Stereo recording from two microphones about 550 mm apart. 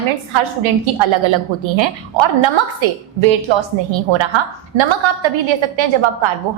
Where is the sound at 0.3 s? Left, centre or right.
Right.